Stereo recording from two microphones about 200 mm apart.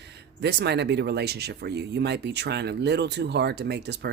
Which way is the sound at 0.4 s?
55° right (ahead or behind).